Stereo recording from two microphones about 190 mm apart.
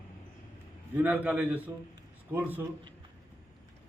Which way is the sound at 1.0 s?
10° right (ahead or behind).